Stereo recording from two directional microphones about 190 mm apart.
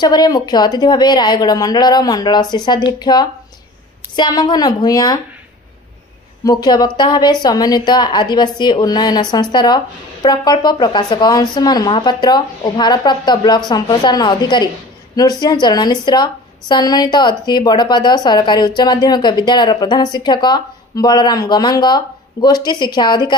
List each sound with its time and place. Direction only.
0.0 s a woman's voice: 20° left (ahead or behind)
6.4 s a woman's voice: 20° left (ahead or behind)